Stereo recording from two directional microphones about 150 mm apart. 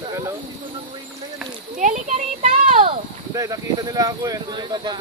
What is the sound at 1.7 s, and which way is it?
Speech, 55° right (ahead or behind).